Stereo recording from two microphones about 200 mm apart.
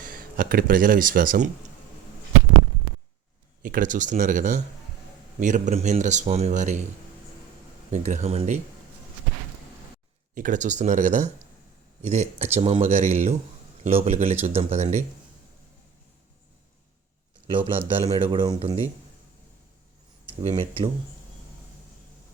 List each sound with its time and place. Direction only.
0.0 s speech: 45° right (ahead or behind)
3.6 s speech: 45° right (ahead or behind)
7.9 s speech: 35° right (ahead or behind)
10.3 s speech: 40° right (ahead or behind)
18.0 s speech: 25° right (ahead or behind)
20.5 s speech: 25° right (ahead or behind)